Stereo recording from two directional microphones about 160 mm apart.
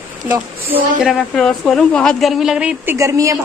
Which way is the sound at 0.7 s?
Centre (ahead or behind).